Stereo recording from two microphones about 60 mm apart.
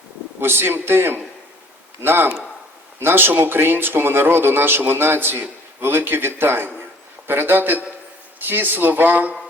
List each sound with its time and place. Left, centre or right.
0.3 s speech: right